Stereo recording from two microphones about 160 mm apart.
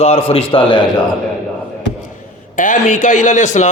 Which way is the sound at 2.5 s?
55° left (ahead or behind).